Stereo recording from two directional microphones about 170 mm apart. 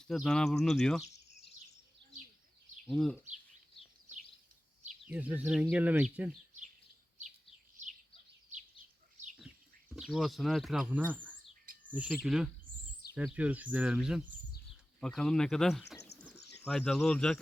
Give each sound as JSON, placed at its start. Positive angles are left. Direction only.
{"t": 0.0, "sound": "speech", "side_deg": 0}
{"t": 2.8, "sound": "speech", "side_deg": 0}
{"t": 5.0, "sound": "speech", "side_deg": -10}
{"t": 9.9, "sound": "speech", "side_deg": 0}
{"t": 11.6, "sound": "bird", "side_deg": -55}
{"t": 11.9, "sound": "speech", "side_deg": -10}